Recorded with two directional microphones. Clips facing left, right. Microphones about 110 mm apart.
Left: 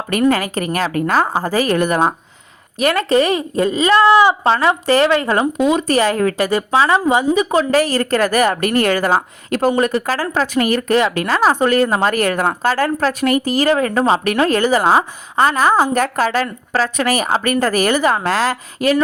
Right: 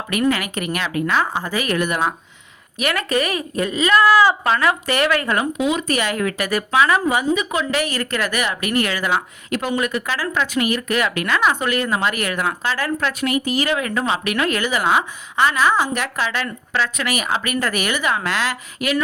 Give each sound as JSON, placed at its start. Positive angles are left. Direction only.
{"t": 0.1, "sound": "a woman's voice", "side_deg": 40}